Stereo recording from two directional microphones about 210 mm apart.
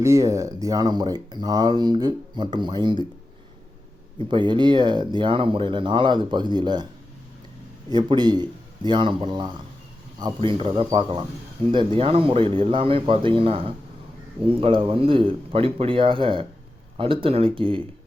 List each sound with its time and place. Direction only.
0.0 s speech: 15° right (ahead or behind)
4.3 s speech: 20° right (ahead or behind)
7.9 s speech: 20° right (ahead or behind)